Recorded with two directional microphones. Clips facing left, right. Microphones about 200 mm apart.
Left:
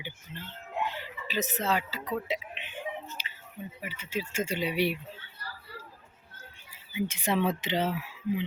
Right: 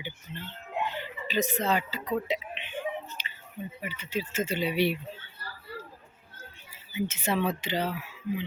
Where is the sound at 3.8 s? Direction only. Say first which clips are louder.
Right 1 dB; 5° left (ahead or behind).